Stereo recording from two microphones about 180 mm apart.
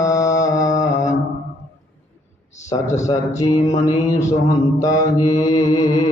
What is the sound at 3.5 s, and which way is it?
Mantra, 20° left (ahead or behind).